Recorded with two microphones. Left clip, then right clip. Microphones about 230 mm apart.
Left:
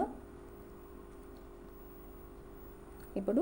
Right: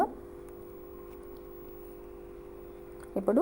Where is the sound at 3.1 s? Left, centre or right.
Centre.